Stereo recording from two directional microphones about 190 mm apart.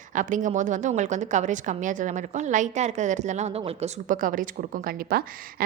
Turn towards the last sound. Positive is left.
turn(degrees=-50)  # may be behind; listen again after turning